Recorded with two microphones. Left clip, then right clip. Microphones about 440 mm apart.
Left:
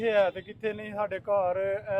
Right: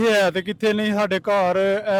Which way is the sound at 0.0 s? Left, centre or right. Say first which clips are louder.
Right 7 dB; right.